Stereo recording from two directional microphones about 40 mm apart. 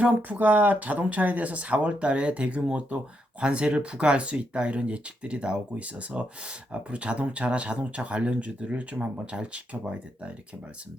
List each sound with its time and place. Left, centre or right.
0.0 s speech: right